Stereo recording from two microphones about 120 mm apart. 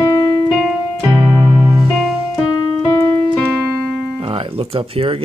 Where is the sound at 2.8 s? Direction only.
35° left (ahead or behind).